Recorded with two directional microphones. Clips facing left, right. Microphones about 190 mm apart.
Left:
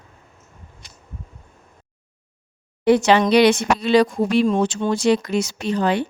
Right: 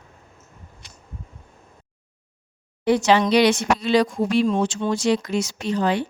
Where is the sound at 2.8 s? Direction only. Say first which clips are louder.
Left 3 dB; 60° left (ahead or behind).